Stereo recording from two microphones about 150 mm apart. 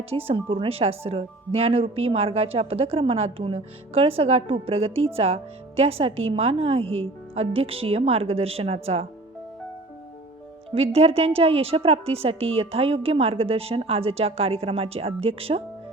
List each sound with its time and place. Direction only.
0.1 s speech: 40° right (ahead or behind)
10.8 s speech: 40° right (ahead or behind)